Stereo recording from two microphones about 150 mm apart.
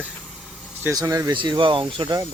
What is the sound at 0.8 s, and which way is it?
Speech, 20° right (ahead or behind).